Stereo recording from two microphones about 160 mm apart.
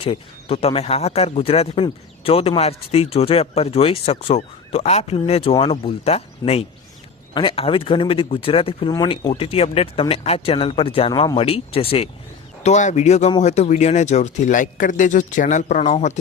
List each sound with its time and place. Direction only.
0.0 s speech: 35° left (ahead or behind)
12.6 s speech: 45° left (ahead or behind)